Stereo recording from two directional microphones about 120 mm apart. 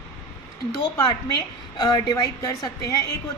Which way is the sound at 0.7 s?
30° left (ahead or behind).